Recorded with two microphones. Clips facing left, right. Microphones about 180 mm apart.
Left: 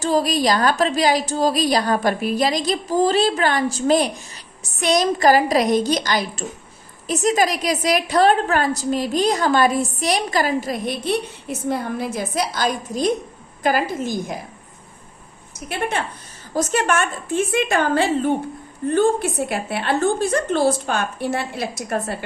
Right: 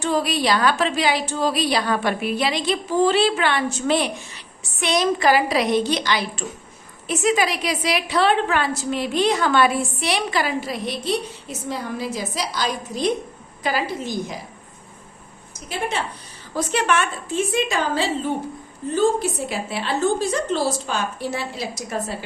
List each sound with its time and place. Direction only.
0.0 s a woman's voice: 40° left (ahead or behind)
15.9 s a woman's voice: 55° left (ahead or behind)